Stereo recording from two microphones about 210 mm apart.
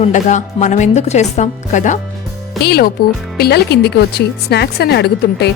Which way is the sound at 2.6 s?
50° left (ahead or behind).